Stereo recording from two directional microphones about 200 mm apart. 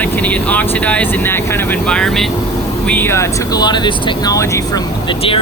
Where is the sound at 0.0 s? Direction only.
5° left (ahead or behind).